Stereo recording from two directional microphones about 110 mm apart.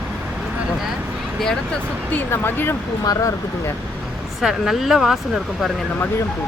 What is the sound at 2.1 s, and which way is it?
Speech, 20° left (ahead or behind).